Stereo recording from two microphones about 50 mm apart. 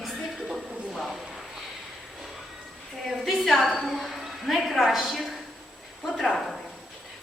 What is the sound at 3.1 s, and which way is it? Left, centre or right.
A woman's voice, centre.